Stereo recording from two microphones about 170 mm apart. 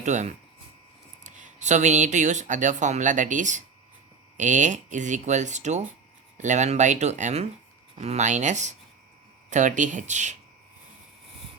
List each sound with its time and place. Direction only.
0.0 s speech: 45° right (ahead or behind)